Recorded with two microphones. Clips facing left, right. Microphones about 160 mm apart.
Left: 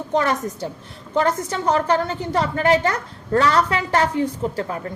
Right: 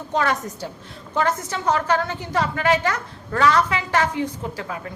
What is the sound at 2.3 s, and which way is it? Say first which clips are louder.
Speech: left 2 dB; 35° left (ahead or behind).